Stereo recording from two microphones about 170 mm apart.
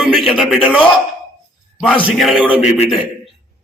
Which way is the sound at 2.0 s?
5° right (ahead or behind).